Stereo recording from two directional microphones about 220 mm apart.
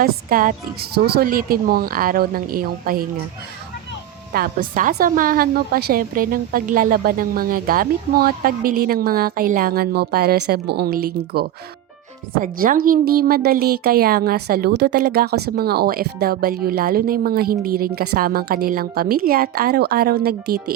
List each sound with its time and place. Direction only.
0.0 s speech: 40° right (ahead or behind)
4.3 s a woman's voice: 40° right (ahead or behind)